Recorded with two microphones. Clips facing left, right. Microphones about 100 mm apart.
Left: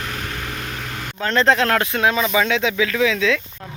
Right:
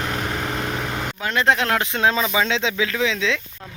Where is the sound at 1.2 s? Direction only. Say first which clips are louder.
Left 3 dB; 10° right (ahead or behind).